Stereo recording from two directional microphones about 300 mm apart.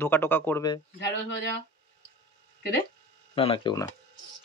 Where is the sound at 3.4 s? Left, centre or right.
Centre.